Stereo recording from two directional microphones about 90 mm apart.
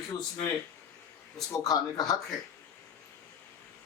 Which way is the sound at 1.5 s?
45° left (ahead or behind).